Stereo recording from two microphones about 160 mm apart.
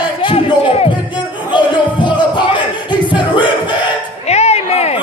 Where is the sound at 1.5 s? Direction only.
30° left (ahead or behind).